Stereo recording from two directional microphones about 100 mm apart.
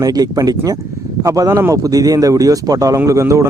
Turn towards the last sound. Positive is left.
turn(degrees=-30)  # may be behind; listen again after turning